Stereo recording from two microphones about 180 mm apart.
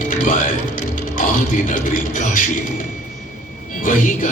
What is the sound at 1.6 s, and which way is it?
Speech, 45° left (ahead or behind).